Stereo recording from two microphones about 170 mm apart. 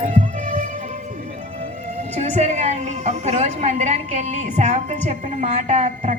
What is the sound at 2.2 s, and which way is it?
A woman's voice, 40° right (ahead or behind).